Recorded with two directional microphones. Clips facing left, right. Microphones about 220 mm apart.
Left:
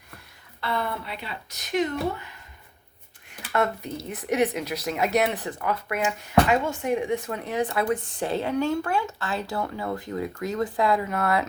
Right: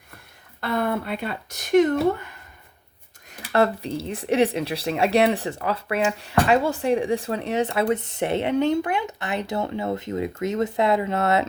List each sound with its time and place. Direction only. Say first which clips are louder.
0.6 s speech: right 5 dB; 50° right (ahead or behind)
3.2 s speech: right 5 dB; 35° right (ahead or behind)